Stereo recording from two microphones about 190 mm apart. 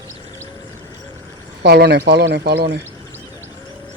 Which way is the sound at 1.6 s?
60° right (ahead or behind).